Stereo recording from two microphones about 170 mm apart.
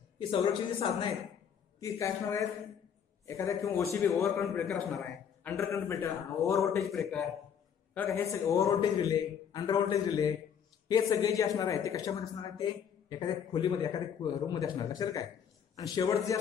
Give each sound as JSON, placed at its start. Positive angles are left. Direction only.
{"t": 0.3, "sound": "speech", "side_deg": 30}
{"t": 1.8, "sound": "a man's voice", "side_deg": 20}
{"t": 4.5, "sound": "a man's voice", "side_deg": 5}
{"t": 5.6, "sound": "a man's voice", "side_deg": 15}
{"t": 6.9, "sound": "a man's voice", "side_deg": 0}